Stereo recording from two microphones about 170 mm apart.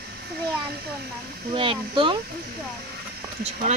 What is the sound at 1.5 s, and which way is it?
Speech, 30° right (ahead or behind).